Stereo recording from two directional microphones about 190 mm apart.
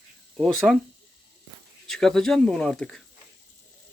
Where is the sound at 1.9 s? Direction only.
Centre (ahead or behind).